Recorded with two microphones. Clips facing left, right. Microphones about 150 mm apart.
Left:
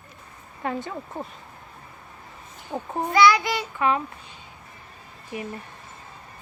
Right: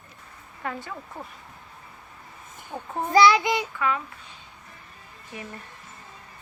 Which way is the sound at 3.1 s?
30° right (ahead or behind).